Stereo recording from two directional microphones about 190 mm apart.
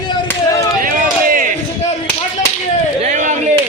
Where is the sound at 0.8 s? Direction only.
45° right (ahead or behind).